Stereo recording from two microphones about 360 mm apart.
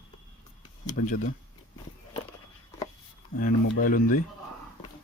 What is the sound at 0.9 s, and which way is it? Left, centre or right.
Speech, left.